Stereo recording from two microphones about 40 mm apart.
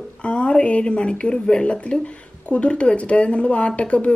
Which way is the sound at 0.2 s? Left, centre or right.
Left.